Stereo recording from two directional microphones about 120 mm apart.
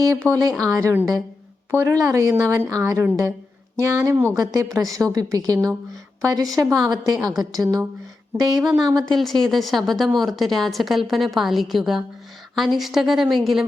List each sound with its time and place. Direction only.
0.3 s a woman's voice: 30° right (ahead or behind)
9.1 s a woman's voice: 5° left (ahead or behind)